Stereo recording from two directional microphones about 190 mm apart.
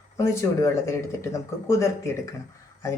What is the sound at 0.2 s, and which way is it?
Speech, 15° left (ahead or behind).